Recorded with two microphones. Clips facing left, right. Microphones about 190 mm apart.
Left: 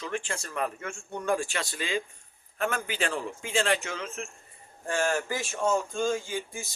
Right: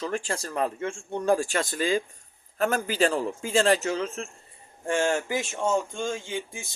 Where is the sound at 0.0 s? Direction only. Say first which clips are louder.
Right 4 dB; 40° right (ahead or behind).